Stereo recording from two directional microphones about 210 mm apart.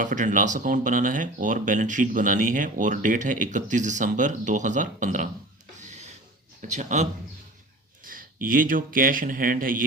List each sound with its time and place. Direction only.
0.0 s speech: 40° right (ahead or behind)
6.6 s speech: 35° right (ahead or behind)